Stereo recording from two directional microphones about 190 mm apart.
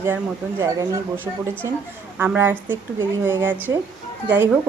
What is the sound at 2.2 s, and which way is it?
Speech, 10° right (ahead or behind).